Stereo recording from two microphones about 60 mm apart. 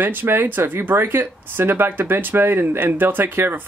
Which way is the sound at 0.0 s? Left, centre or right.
Right.